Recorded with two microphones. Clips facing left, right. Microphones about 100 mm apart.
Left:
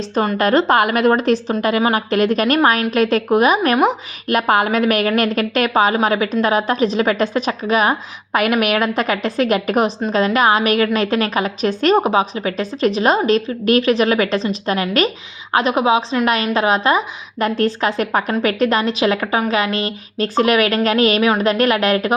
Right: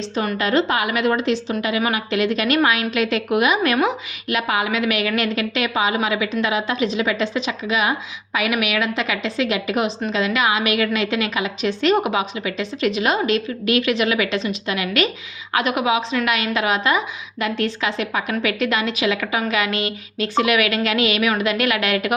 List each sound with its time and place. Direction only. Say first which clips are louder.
0.3 s a woman's voice: left 6 dB; 45° left (ahead or behind)